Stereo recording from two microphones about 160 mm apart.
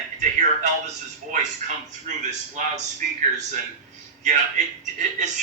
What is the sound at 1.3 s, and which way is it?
Speech, 50° right (ahead or behind).